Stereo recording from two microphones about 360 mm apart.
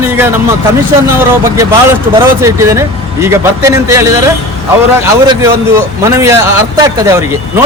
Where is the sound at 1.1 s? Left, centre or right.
Centre.